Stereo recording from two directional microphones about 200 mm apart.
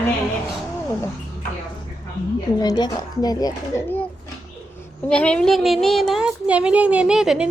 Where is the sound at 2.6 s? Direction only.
20° left (ahead or behind).